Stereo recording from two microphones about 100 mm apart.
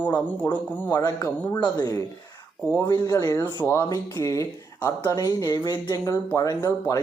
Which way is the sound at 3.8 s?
35° left (ahead or behind).